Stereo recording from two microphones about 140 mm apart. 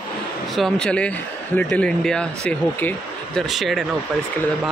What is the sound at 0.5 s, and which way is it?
Speech, 5° left (ahead or behind).